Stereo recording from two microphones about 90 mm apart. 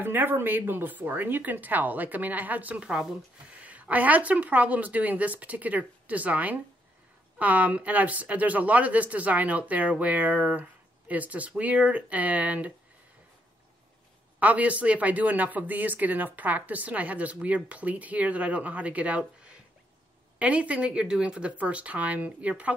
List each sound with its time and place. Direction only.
0.0 s speech: 20° right (ahead or behind)
14.4 s speech: 15° right (ahead or behind)